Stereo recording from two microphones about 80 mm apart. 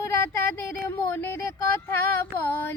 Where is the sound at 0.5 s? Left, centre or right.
Left.